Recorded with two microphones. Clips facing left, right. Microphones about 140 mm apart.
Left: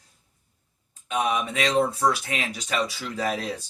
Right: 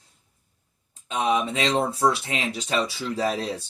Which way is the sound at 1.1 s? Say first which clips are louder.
Right 2 dB; 25° right (ahead or behind).